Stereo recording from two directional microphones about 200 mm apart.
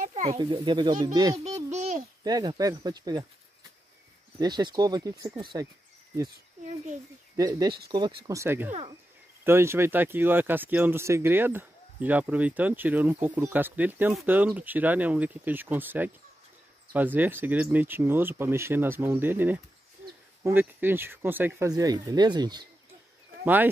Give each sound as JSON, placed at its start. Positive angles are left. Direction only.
{"t": 0.0, "sound": "a child's voice", "side_deg": -35}
{"t": 1.7, "sound": "a sound", "side_deg": -35}
{"t": 2.2, "sound": "a child's voice", "side_deg": -20}
{"t": 4.4, "sound": "a child's voice", "side_deg": -20}
{"t": 7.3, "sound": "speech", "side_deg": -20}
{"t": 23.4, "sound": "speech", "side_deg": -10}